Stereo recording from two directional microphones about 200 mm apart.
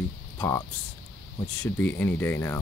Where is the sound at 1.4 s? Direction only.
10° left (ahead or behind).